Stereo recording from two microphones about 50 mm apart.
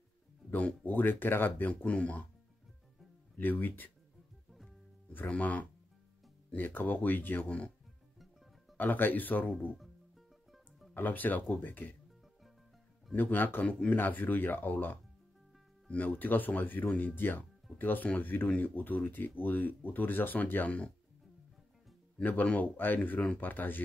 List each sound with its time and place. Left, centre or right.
0.8 s speech: left
1.9 s speech: left
3.3 s speech: left
5.3 s speech: left
6.5 s speech: left
7.4 s speech: left
8.7 s speech: left
10.9 s speech: left
13.1 s speech: left
22.2 s speech: left